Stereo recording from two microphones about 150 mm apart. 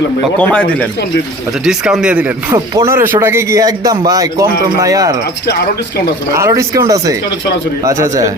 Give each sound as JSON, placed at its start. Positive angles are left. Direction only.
{"t": 0.3, "sound": "speech", "side_deg": 10}
{"t": 1.6, "sound": "speech", "side_deg": -5}
{"t": 2.5, "sound": "speech", "side_deg": -20}
{"t": 6.3, "sound": "speech", "side_deg": -20}